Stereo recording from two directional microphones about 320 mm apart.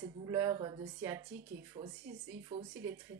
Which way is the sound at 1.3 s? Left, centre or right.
Right.